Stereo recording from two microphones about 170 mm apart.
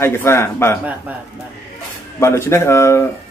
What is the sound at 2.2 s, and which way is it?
Speech, 15° left (ahead or behind).